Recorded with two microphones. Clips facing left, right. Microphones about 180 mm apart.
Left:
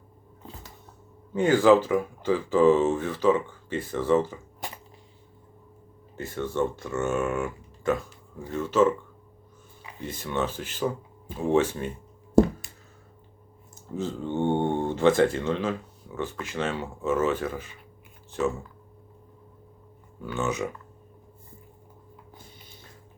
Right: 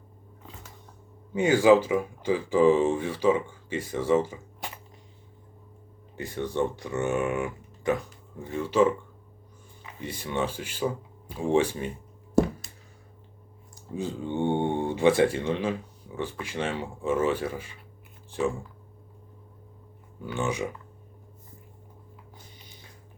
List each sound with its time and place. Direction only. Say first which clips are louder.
1.3 s speech: even; 10° right (ahead or behind)
6.1 s speech: even; 15° right (ahead or behind)
10.0 s speech: left 1 dB; 10° right (ahead or behind)
13.9 s speech: left 1 dB; 15° right (ahead or behind)
20.2 s speech: left 1 dB; 15° right (ahead or behind)